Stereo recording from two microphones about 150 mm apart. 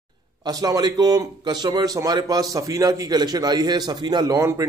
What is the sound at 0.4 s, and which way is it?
A man's voice, 25° right (ahead or behind).